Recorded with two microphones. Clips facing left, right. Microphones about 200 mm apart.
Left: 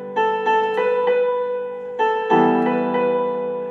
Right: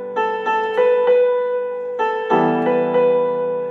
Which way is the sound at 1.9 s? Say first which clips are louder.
Left 2 dB; 20° left (ahead or behind).